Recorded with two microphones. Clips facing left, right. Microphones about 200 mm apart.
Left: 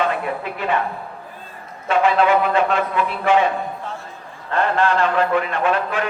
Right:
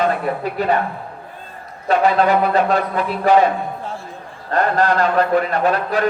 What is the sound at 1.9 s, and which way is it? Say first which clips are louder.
Speech: right 1 dB; 40° right (ahead or behind).